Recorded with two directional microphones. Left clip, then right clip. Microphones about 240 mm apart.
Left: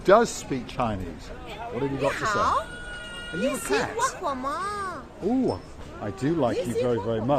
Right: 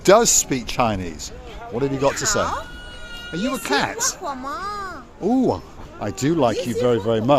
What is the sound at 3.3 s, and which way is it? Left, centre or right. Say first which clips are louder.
Speech: right 4 dB; right.